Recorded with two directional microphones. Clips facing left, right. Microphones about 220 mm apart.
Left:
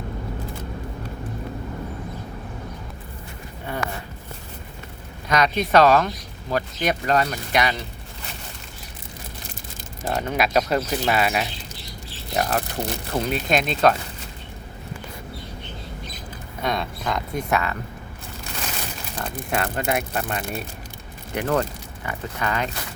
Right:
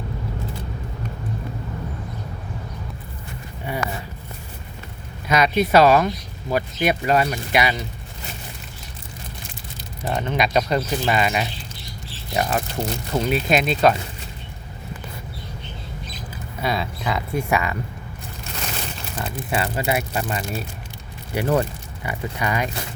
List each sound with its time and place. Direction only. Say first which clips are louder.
3.7 s a sound: right 2 dB; 15° right (ahead or behind)
5.3 s speech: right 2 dB; 10° right (ahead or behind)
10.1 s speech: right 1 dB; 5° left (ahead or behind)
16.3 s speech: right 1 dB; 5° right (ahead or behind)
19.2 s speech: right 1 dB; 5° right (ahead or behind)